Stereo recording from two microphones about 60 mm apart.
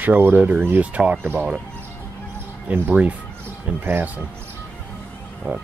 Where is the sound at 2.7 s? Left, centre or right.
Right.